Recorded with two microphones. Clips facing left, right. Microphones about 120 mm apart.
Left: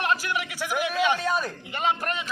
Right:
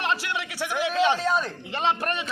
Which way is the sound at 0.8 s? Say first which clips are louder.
Right 2 dB; 30° right (ahead or behind).